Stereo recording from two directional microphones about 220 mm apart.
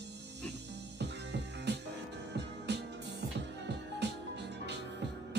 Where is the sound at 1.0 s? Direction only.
50° right (ahead or behind).